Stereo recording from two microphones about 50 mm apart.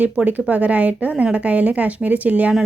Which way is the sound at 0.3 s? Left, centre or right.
Right.